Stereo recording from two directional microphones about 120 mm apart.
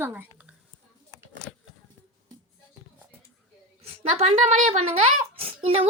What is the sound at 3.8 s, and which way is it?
A woman's voice, 60° right (ahead or behind).